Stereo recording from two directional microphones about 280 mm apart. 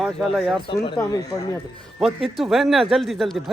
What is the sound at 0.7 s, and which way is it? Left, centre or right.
Speech, centre.